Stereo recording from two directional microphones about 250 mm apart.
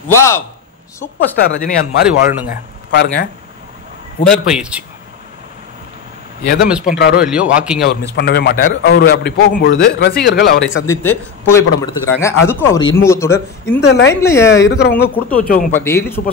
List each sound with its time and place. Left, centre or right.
0.1 s a man's voice: centre
1.4 s a man's voice: left
4.3 s speech: centre
6.4 s a man's voice: left
7.2 s speech: centre
8.2 s a man's voice: left
10.9 s a man's voice: centre
13.7 s speech: left
14.2 s a man's voice: centre
14.7 s a man's voice: left
15.0 s a man's voice: centre
15.3 s a man's voice: left
15.8 s a man's voice: centre